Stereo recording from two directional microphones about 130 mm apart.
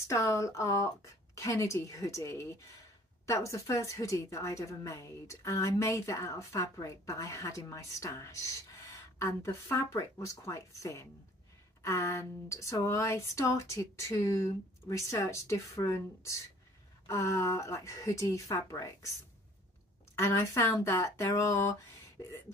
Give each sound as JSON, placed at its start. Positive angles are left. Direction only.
{"t": 0.1, "sound": "a woman's voice", "side_deg": 25}
{"t": 20.2, "sound": "a woman's voice", "side_deg": 20}